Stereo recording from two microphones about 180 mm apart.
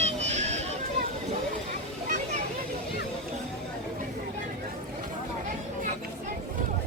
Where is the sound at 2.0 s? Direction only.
50° right (ahead or behind).